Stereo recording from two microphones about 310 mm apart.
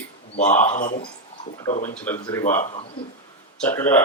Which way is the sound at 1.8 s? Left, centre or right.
Centre.